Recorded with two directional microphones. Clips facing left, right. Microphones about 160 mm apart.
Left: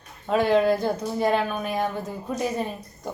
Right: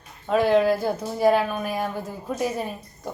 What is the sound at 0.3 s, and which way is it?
Speech, centre (ahead or behind).